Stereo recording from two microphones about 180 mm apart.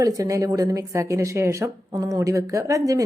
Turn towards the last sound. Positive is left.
turn(degrees=-20)  # may be behind; listen again after turning